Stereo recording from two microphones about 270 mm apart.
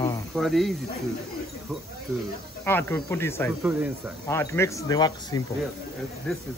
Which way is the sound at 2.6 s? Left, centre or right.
Centre.